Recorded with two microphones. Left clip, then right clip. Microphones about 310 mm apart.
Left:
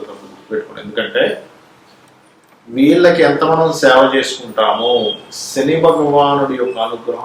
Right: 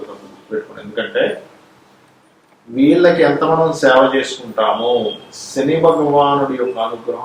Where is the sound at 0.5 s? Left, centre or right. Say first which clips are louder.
Left 2 dB; centre.